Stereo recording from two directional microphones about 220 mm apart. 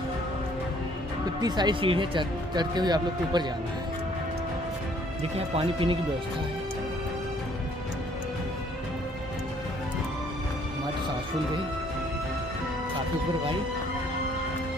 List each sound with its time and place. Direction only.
1.4 s speech: 20° right (ahead or behind)
5.6 s speech: 25° right (ahead or behind)